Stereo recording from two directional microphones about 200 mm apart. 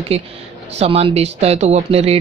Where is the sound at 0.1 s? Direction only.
30° right (ahead or behind).